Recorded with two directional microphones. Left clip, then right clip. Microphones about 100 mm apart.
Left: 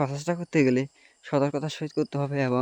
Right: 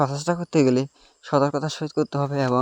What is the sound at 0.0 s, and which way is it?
Speech, 35° right (ahead or behind).